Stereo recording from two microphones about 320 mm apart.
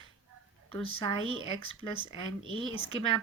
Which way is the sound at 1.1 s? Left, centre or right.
Right.